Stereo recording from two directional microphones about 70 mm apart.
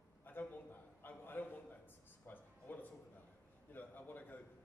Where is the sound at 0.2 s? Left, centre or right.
Left.